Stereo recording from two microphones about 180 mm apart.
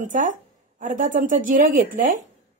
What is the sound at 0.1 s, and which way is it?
A woman's voice, 45° right (ahead or behind).